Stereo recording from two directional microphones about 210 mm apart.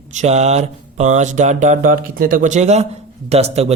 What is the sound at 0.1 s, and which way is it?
A man's voice, 35° right (ahead or behind).